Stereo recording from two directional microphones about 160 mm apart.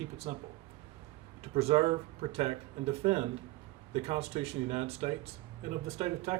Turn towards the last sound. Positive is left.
turn(degrees=-40)  # may be behind; listen again after turning